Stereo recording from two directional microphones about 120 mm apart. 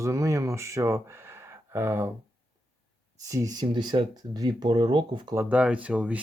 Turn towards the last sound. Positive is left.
turn(degrees=-10)  # may be behind; listen again after turning